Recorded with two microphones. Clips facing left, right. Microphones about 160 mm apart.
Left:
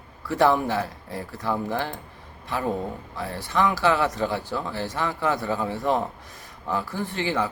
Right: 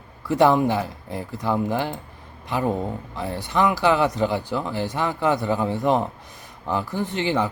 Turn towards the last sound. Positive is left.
turn(degrees=-20)  # may be behind; listen again after turning